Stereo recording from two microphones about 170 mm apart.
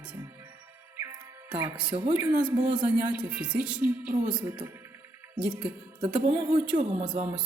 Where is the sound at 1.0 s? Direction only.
10° right (ahead or behind).